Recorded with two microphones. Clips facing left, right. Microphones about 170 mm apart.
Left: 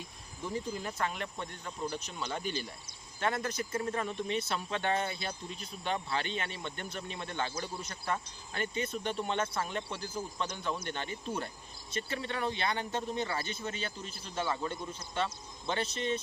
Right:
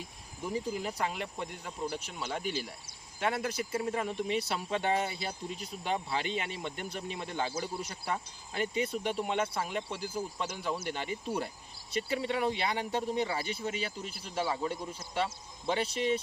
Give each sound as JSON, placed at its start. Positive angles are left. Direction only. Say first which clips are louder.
{"t": 0.4, "sound": "speech", "louder": "right 2 dB", "side_deg": -10}